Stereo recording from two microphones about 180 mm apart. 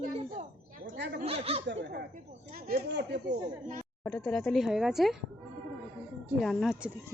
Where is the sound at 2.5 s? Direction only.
60° right (ahead or behind).